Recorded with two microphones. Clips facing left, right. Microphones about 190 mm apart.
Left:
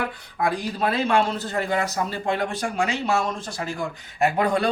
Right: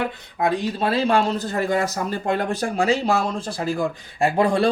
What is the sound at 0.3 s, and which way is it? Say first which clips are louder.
Speech: right 3 dB; 20° right (ahead or behind).